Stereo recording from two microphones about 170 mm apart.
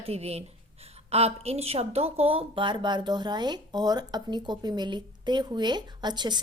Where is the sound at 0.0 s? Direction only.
35° right (ahead or behind).